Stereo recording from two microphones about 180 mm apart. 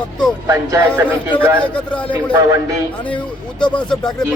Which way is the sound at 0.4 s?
15° right (ahead or behind).